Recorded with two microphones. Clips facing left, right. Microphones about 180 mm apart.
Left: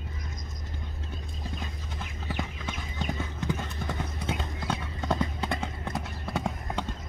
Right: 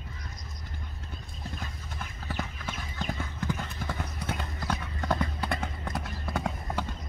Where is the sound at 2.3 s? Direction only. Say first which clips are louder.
Left 2 dB; 15° left (ahead or behind).